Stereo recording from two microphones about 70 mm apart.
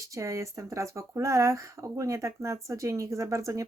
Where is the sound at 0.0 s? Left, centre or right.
Right.